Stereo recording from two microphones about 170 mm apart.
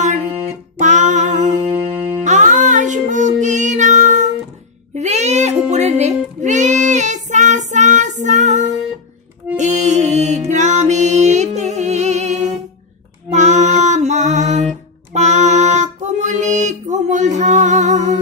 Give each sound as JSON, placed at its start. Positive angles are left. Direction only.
{"t": 0.7, "sound": "music", "side_deg": -45}
{"t": 13.3, "sound": "a sound", "side_deg": -45}
{"t": 15.1, "sound": "female singing", "side_deg": -45}